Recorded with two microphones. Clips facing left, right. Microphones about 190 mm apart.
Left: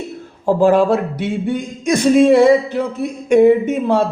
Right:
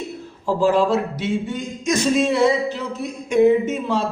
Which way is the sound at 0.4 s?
55° left (ahead or behind).